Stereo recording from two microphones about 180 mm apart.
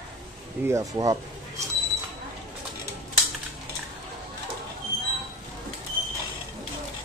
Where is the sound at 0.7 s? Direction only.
20° right (ahead or behind).